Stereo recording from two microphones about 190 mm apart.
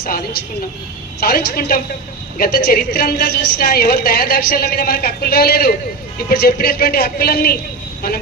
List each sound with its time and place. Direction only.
0.0 s a woman's voice: 50° left (ahead or behind)